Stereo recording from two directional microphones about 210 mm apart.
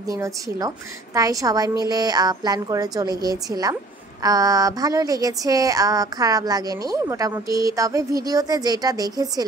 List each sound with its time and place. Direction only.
0.1 s speech: 15° right (ahead or behind)